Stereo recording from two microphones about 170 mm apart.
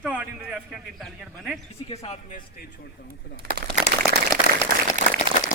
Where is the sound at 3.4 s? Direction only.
65° right (ahead or behind).